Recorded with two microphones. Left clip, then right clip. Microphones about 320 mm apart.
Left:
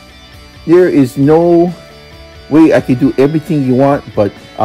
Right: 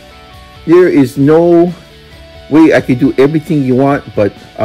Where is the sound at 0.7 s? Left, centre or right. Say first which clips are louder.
Right 1 dB; centre.